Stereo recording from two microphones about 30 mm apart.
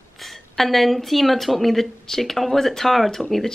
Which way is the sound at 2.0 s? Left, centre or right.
Centre.